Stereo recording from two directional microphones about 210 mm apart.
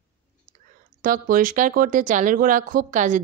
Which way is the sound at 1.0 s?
40° right (ahead or behind).